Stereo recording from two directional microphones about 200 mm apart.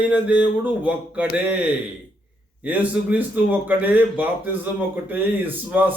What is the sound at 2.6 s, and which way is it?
A man's voice, 10° right (ahead or behind).